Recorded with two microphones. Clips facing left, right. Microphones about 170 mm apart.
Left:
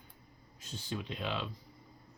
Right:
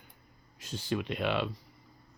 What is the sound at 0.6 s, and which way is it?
Speech, 85° right.